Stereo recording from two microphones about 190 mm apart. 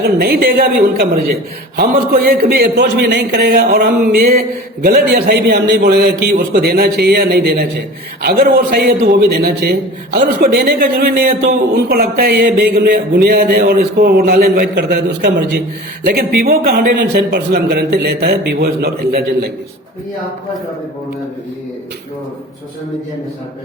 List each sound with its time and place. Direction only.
0.0 s a man's voice: 55° right (ahead or behind)